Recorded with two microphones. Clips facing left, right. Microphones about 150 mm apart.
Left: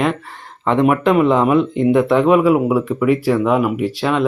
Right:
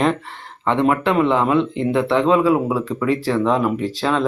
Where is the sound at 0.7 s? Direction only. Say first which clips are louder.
Left 4 dB; 15° left (ahead or behind).